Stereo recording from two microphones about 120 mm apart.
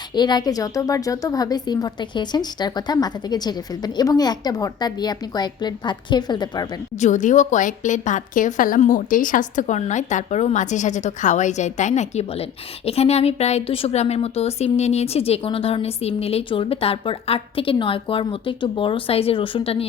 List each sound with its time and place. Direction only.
0.1 s a woman's voice: 35° left (ahead or behind)
7.0 s a woman's voice: 90° left; by 19.9 s 55° left (ahead or behind)